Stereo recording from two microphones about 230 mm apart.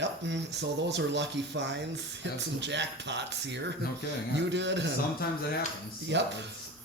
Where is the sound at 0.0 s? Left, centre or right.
Right.